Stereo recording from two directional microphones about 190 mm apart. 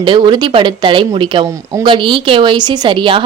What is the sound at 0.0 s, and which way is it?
Speech, 25° right (ahead or behind).